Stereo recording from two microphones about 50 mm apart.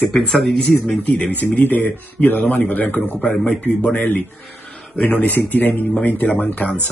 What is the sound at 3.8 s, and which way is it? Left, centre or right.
Speech, left.